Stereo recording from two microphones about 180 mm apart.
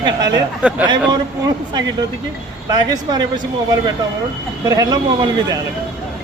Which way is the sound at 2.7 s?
20° right (ahead or behind).